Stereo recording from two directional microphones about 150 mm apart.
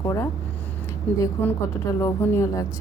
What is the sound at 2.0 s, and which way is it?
Speech, 20° left (ahead or behind).